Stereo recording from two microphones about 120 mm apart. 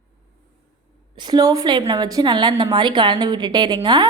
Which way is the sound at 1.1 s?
35° right (ahead or behind).